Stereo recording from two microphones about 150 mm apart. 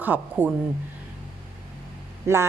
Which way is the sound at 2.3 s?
20° right (ahead or behind).